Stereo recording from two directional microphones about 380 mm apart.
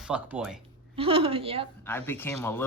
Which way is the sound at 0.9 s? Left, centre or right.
Centre.